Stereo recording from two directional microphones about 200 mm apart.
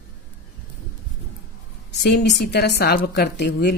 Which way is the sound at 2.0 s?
55° left (ahead or behind).